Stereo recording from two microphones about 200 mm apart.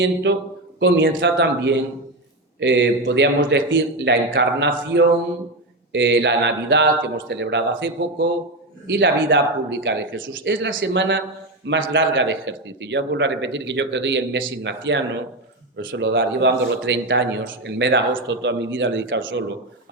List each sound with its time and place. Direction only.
0.0 s a man's voice: 60° right (ahead or behind)